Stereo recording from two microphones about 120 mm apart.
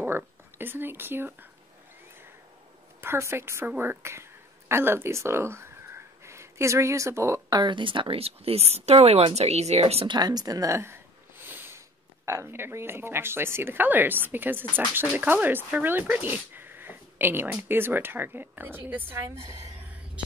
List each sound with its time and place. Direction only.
0.0 s speech: 15° right (ahead or behind)
3.0 s a woman's voice: 20° right (ahead or behind); by 10.0 s 60° right (ahead or behind)
10.0 s a sound: 35° right (ahead or behind); by 11.8 s 15° right (ahead or behind)
12.3 s speech: 20° right (ahead or behind)